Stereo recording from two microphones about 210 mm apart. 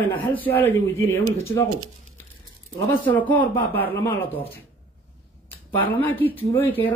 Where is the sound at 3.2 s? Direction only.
10° left (ahead or behind).